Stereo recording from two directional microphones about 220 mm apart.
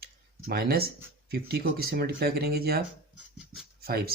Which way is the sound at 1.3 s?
45° right (ahead or behind).